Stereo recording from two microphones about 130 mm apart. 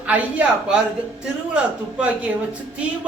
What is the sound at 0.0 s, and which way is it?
Speech, 10° right (ahead or behind).